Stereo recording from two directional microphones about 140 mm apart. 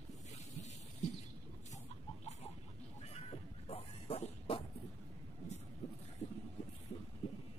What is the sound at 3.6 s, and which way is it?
Music, 45° left (ahead or behind).